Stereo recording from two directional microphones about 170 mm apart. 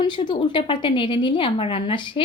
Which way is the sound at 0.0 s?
25° left (ahead or behind).